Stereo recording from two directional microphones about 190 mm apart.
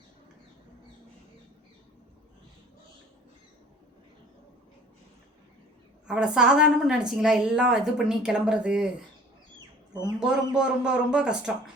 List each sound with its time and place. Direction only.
6.1 s a woman's voice: 5° right (ahead or behind)
10.2 s a woman's voice: 5° right (ahead or behind)